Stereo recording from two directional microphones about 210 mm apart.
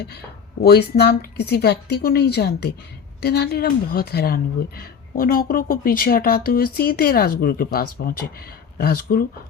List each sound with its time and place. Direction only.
0.6 s a woman's voice: 50° left (ahead or behind)